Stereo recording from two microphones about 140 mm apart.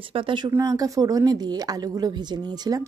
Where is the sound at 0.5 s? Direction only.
20° right (ahead or behind).